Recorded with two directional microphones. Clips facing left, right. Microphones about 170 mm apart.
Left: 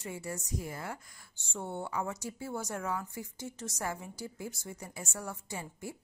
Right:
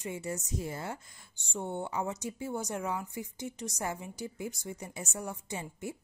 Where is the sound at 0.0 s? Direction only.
20° right (ahead or behind).